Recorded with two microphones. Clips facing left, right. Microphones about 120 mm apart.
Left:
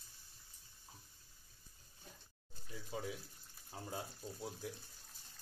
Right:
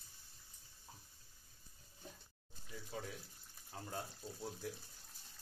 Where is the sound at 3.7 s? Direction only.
10° left (ahead or behind).